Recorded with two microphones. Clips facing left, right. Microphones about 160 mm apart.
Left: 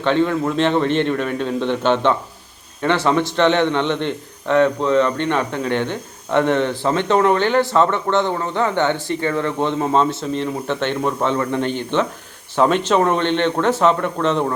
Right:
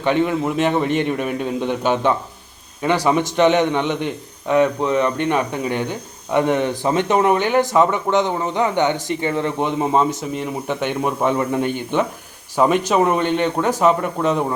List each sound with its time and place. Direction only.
0.0 s a man's voice: 15° right (ahead or behind)